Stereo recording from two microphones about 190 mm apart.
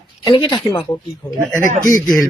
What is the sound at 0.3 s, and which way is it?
Speech, 25° left (ahead or behind).